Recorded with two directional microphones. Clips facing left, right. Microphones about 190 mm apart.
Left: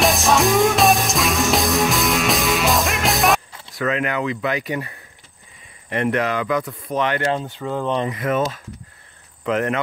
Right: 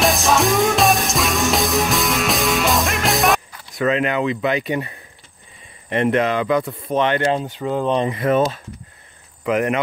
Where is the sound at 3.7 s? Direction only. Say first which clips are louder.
Right 3 dB; 25° right (ahead or behind).